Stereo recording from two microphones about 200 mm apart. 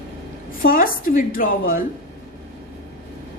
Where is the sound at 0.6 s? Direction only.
45° left (ahead or behind).